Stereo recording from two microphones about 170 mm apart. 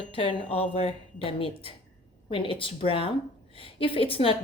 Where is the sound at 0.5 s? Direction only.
35° left (ahead or behind).